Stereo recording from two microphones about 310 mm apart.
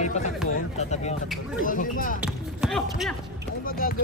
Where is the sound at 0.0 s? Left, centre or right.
Left.